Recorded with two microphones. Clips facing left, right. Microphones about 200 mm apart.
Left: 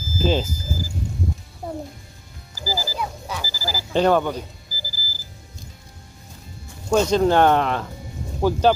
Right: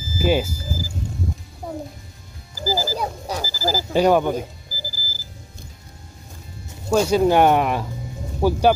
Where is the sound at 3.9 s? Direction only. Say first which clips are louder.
Right 1 dB; 10° right (ahead or behind).